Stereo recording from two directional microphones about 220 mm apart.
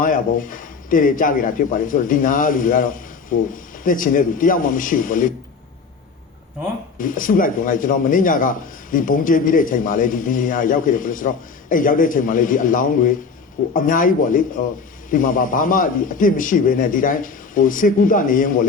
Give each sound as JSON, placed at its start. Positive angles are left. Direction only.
{"t": 0.0, "sound": "a man's voice", "side_deg": 40}
{"t": 7.0, "sound": "a man's voice", "side_deg": 40}